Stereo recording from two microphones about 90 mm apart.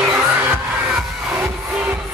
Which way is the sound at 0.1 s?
20° right (ahead or behind).